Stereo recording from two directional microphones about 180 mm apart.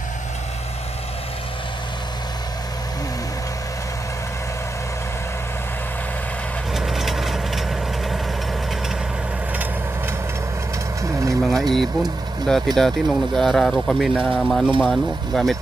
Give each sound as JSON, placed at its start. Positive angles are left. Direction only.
{"t": 6.7, "sound": "vehicle", "side_deg": 0}
{"t": 11.0, "sound": "vehicle", "side_deg": -15}
{"t": 11.4, "sound": "speech", "side_deg": 0}